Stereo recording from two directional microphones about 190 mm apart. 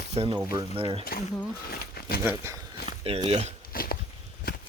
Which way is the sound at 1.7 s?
55° left (ahead or behind).